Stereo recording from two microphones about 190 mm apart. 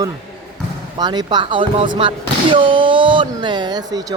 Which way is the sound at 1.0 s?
20° right (ahead or behind).